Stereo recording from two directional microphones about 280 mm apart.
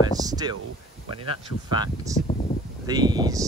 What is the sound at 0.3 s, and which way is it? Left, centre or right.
Speech, centre.